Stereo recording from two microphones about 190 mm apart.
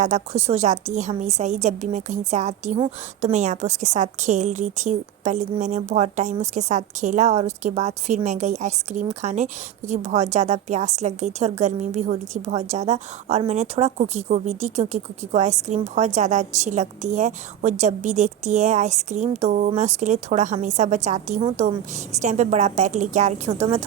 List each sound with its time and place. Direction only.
0.0 s a woman's voice: 35° right (ahead or behind)